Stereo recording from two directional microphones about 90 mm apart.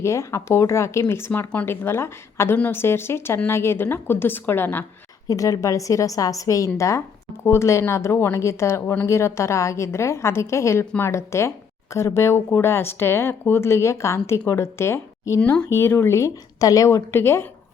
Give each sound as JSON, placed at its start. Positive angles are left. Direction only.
{"t": 0.0, "sound": "speech", "side_deg": 35}
{"t": 5.3, "sound": "a woman's voice", "side_deg": 40}